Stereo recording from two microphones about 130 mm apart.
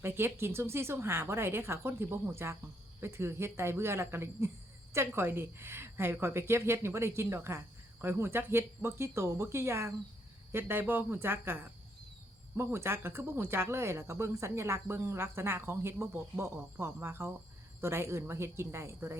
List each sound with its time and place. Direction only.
0.0 s speech: 15° right (ahead or behind)